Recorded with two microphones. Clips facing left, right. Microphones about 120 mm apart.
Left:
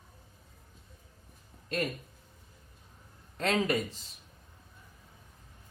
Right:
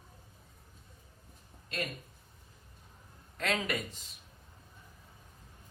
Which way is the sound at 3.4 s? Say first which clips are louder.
Left 5 dB; 30° left (ahead or behind).